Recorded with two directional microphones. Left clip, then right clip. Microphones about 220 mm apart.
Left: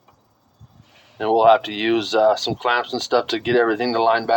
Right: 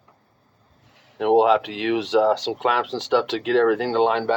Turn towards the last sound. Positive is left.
turn(degrees=35)  # may be behind; listen again after turning